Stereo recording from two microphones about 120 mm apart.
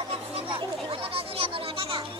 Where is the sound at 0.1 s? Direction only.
55° right (ahead or behind).